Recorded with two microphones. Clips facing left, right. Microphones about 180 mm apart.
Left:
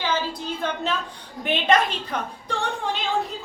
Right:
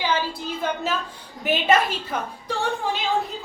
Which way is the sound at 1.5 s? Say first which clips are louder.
Right 1 dB; 5° right (ahead or behind).